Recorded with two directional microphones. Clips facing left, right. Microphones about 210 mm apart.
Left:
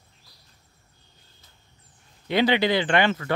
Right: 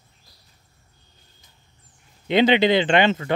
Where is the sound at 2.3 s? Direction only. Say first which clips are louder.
Right 4 dB; 20° right (ahead or behind).